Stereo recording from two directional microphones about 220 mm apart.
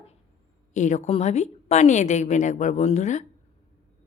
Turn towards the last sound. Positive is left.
turn(degrees=35)  # may be behind; listen again after turning